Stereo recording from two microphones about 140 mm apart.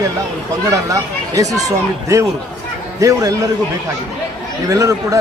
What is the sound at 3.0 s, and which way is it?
Speech, 25° right (ahead or behind).